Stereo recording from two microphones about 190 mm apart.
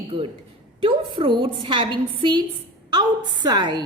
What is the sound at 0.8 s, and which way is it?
A woman's voice, 25° right (ahead or behind).